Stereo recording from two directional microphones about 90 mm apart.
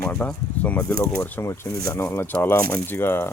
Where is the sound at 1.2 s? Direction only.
30° left (ahead or behind).